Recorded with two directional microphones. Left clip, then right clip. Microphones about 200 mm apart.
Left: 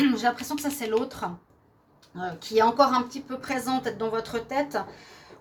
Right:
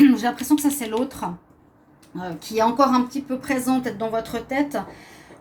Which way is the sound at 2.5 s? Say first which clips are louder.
Right 2 dB; 45° left (ahead or behind).